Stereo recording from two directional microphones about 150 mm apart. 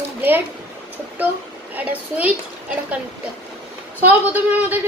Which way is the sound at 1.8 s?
10° right (ahead or behind).